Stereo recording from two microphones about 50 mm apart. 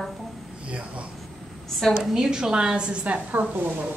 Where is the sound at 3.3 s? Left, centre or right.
Right.